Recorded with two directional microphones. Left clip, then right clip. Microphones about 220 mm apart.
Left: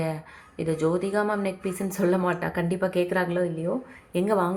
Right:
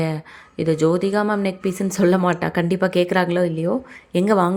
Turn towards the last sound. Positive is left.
turn(degrees=-35)  # may be behind; listen again after turning